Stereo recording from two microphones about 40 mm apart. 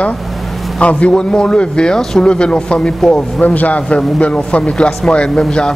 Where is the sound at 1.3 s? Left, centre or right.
Left.